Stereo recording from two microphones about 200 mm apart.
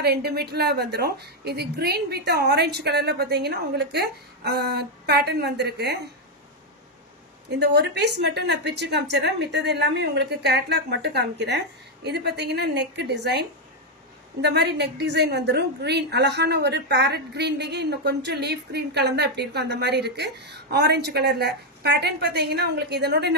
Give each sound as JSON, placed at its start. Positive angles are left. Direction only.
{"t": 0.0, "sound": "a woman's voice", "side_deg": -55}
{"t": 7.4, "sound": "a woman's voice", "side_deg": -55}